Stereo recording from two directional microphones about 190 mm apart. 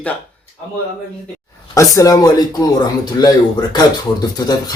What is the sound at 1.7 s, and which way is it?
Speech, 15° left (ahead or behind).